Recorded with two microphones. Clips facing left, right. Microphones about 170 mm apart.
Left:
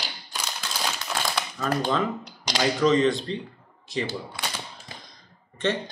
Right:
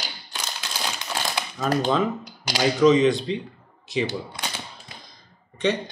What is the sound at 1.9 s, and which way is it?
Speech, 5° right (ahead or behind).